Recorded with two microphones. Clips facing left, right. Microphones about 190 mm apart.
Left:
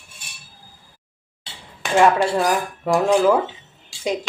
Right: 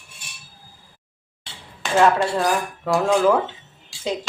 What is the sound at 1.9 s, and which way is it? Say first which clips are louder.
Dishes: left 1 dB; 15° left (ahead or behind).